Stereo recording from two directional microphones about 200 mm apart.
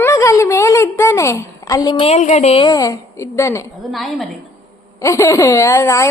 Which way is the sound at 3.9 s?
Centre (ahead or behind).